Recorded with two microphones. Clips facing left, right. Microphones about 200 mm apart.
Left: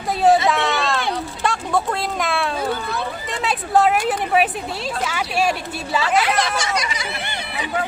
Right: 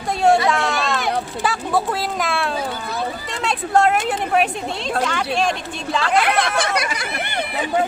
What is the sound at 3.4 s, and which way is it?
A woman's voice, centre (ahead or behind).